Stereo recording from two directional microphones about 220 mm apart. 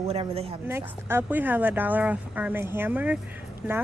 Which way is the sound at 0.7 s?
10° right (ahead or behind).